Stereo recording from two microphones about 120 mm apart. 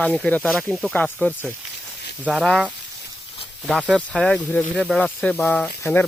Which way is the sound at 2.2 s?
Centre (ahead or behind).